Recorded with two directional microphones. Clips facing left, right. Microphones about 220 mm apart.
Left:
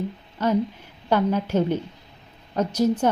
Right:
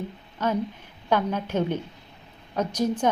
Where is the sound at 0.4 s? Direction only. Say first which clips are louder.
Left 4 dB; 10° left (ahead or behind).